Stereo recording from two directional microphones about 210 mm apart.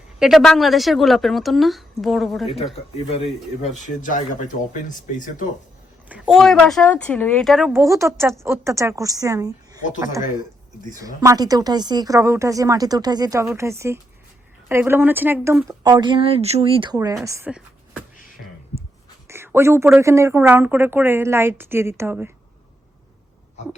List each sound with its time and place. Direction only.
0.2 s a woman's voice: centre (ahead or behind)
3.1 s speech: 30° left (ahead or behind)
6.1 s a woman's voice: 5° right (ahead or behind)
7.7 s speech: 15° right (ahead or behind)
10.9 s speech: 15° right (ahead or behind)
19.3 s a sound: 10° right (ahead or behind)
20.0 s speech: 15° right (ahead or behind)